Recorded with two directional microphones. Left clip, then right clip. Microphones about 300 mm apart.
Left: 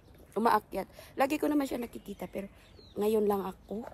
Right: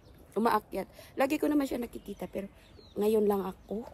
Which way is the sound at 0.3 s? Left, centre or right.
Centre.